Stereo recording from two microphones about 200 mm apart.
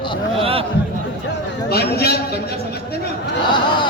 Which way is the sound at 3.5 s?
25° left (ahead or behind).